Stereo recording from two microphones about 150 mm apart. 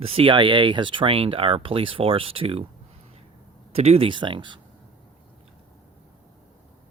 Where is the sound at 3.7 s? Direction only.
45° right (ahead or behind).